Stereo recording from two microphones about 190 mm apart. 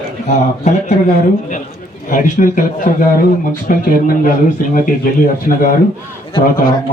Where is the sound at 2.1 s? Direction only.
45° left (ahead or behind).